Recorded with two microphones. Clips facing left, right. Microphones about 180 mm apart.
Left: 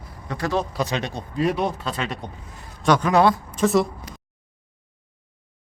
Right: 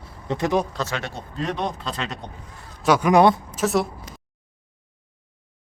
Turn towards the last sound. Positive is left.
turn(degrees=0)  # may be behind; listen again after turning